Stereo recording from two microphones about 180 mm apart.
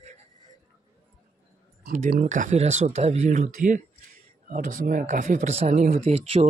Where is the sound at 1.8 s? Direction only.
50° right (ahead or behind).